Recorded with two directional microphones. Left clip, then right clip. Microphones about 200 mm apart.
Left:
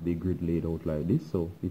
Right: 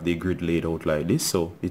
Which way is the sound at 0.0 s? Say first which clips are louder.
Right 6 dB; 10° right (ahead or behind).